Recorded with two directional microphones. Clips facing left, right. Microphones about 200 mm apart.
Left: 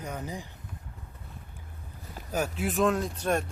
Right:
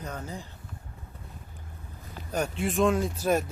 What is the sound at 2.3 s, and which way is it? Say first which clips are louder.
Speech: right 1 dB; 5° left (ahead or behind).